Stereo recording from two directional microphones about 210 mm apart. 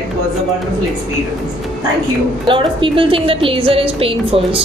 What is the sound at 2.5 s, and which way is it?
A woman's voice, 25° right (ahead or behind).